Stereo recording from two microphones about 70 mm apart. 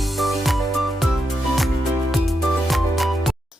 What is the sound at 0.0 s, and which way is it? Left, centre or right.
Music, centre.